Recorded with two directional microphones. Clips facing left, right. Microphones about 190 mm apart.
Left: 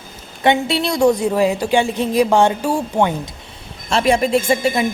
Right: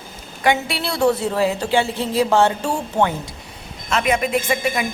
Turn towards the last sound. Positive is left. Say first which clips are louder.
# left 4 dB
turn(degrees=30)  # may be behind; listen again after turning